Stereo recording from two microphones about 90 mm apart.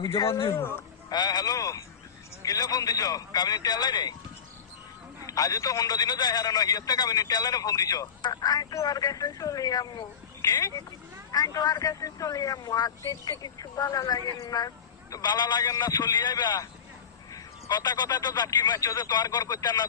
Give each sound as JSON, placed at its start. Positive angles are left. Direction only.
{"t": 0.5, "sound": "speech", "side_deg": 25}
{"t": 1.1, "sound": "a man's voice", "side_deg": 50}
{"t": 5.2, "sound": "a man's voice", "side_deg": 40}
{"t": 13.0, "sound": "a man's voice", "side_deg": 35}